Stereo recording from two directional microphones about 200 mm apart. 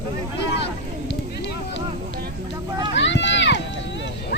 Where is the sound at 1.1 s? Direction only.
60° left (ahead or behind).